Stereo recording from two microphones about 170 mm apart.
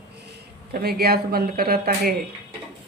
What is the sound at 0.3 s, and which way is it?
Speech, 65° right (ahead or behind).